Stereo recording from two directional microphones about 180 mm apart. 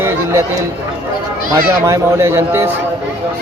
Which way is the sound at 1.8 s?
15° right (ahead or behind).